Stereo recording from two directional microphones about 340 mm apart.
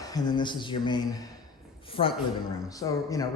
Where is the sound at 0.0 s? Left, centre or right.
Centre.